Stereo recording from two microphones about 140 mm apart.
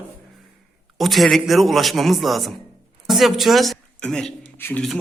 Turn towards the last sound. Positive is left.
turn(degrees=15)  # may be behind; listen again after turning